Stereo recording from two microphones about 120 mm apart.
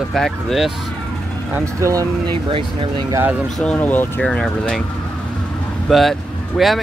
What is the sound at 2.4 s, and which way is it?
Speech, 45° right (ahead or behind).